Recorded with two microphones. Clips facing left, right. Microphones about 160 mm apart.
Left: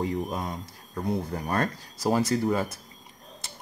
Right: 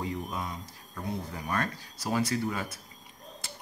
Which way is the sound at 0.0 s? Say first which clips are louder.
Left 5 dB; 45° left (ahead or behind).